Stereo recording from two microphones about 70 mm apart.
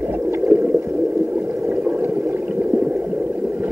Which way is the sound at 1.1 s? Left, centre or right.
Right.